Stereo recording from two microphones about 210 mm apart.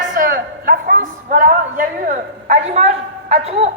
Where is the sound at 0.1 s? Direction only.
40° right (ahead or behind).